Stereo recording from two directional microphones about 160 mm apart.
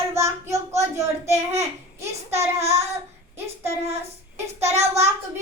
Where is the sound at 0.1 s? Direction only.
20° right (ahead or behind).